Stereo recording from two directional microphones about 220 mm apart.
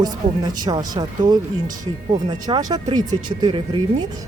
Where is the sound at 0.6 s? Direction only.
15° right (ahead or behind).